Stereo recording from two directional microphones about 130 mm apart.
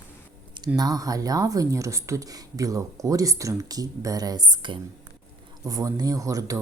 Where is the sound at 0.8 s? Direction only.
30° right (ahead or behind).